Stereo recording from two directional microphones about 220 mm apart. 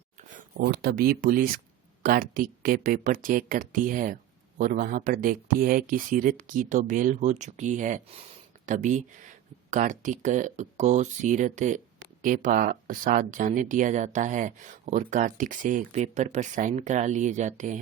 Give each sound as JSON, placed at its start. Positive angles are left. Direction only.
{"t": 0.5, "sound": "speech", "side_deg": -45}